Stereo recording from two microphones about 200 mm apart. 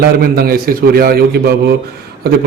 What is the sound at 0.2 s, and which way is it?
A man's voice, 50° right (ahead or behind).